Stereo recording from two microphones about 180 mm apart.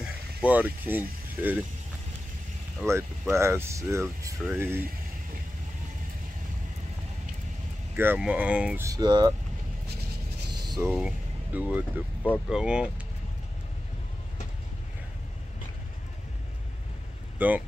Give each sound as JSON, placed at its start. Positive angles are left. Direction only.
{"t": 0.0, "sound": "speech", "side_deg": -5}
{"t": 2.8, "sound": "speech", "side_deg": -15}
{"t": 7.9, "sound": "speech", "side_deg": -10}
{"t": 10.5, "sound": "a sound", "side_deg": -25}
{"t": 10.9, "sound": "speech", "side_deg": -5}
{"t": 17.4, "sound": "speech", "side_deg": -10}